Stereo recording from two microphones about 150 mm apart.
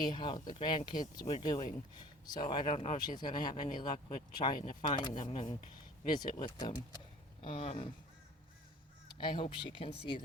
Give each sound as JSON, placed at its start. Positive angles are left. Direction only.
{"t": 0.0, "sound": "speech", "side_deg": 30}
{"t": 2.7, "sound": "speech", "side_deg": 45}
{"t": 3.2, "sound": "speech", "side_deg": 30}
{"t": 7.4, "sound": "speech", "side_deg": 45}
{"t": 9.1, "sound": "speech", "side_deg": 35}